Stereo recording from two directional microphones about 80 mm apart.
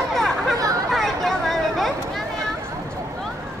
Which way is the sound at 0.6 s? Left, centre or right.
Right.